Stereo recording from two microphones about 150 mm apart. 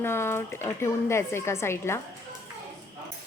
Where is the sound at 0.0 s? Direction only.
15° left (ahead or behind).